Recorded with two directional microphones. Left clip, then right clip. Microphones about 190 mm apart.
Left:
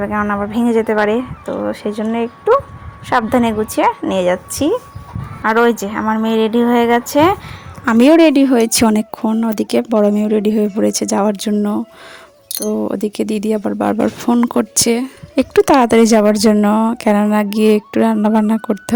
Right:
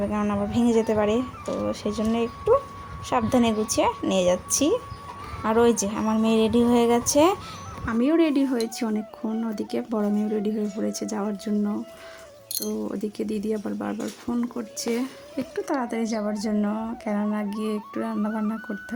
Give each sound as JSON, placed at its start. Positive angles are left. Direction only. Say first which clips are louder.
{"t": 0.0, "sound": "a woman's voice", "louder": "left 9 dB", "side_deg": 15}
{"t": 7.9, "sound": "a woman's voice", "louder": "left 13 dB", "side_deg": 50}